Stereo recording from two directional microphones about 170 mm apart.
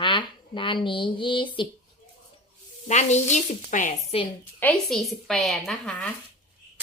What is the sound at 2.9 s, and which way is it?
Speech, 40° left (ahead or behind).